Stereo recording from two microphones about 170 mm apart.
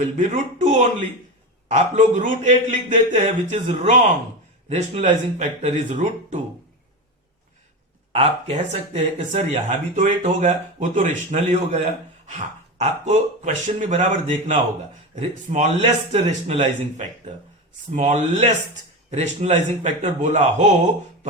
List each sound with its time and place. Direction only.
0.0 s speech: 45° right (ahead or behind)
8.1 s speech: 35° right (ahead or behind)